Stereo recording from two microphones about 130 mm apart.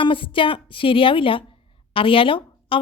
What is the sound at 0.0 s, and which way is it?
A woman's voice, 40° left (ahead or behind).